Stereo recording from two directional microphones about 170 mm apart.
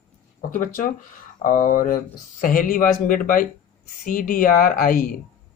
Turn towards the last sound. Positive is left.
turn(degrees=55)  # may be behind; listen again after turning